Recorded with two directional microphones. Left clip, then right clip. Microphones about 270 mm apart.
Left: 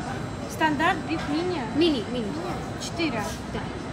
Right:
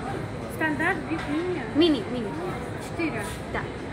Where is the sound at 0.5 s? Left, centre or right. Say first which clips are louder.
Left 3 dB; left.